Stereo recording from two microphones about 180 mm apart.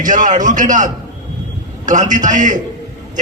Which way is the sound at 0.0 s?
45° right (ahead or behind).